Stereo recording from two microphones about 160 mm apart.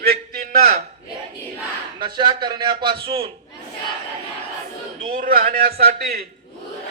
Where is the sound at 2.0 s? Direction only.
30° right (ahead or behind).